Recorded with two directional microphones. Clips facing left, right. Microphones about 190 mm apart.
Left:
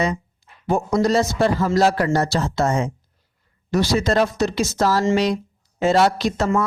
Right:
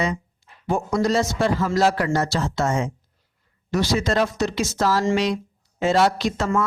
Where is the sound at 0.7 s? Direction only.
35° left (ahead or behind).